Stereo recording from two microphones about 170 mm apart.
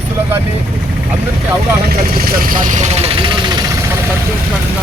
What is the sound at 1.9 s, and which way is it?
Speech, 60° right (ahead or behind).